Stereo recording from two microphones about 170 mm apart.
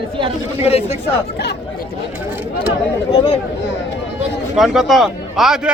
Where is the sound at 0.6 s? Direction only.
35° left (ahead or behind).